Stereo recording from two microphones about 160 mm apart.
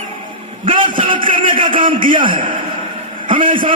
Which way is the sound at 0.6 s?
35° right (ahead or behind).